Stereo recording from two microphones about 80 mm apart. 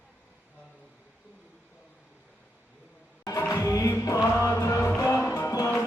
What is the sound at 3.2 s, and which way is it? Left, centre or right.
Music, left.